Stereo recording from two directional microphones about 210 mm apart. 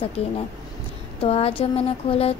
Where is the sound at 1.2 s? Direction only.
30° left (ahead or behind).